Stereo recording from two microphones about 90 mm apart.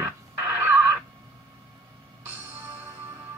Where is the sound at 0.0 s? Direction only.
20° right (ahead or behind).